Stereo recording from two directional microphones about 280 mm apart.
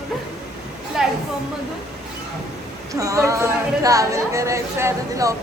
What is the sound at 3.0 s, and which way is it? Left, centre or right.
Speech, centre.